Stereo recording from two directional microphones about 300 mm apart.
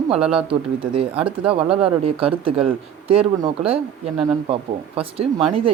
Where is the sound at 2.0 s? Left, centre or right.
Centre.